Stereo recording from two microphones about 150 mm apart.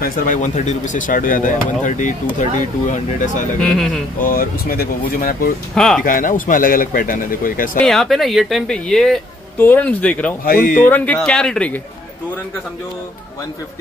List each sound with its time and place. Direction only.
0.0 s speech: 70° left (ahead or behind); by 3.0 s 55° left (ahead or behind)
3.6 s speech: 5° left (ahead or behind)
4.2 s a man's voice: 70° left (ahead or behind)
5.8 s speech: 5° left (ahead or behind)
6.0 s a man's voice: 65° left (ahead or behind)
7.8 s speech: centre (ahead or behind)
10.4 s a man's voice: 70° left (ahead or behind)
10.9 s speech: 10° left (ahead or behind)